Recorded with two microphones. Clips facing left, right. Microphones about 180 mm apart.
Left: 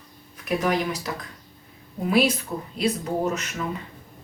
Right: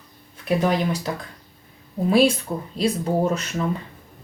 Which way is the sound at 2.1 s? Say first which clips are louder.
Right 4 dB; 30° right (ahead or behind).